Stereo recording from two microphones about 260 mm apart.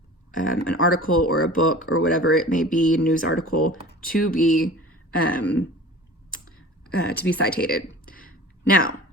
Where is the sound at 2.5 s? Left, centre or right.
Left.